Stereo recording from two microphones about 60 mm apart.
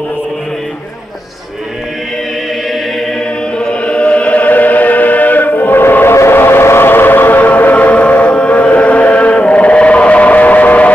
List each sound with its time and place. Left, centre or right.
3.5 s choir: centre; by 6.1 s left
6.1 s train: left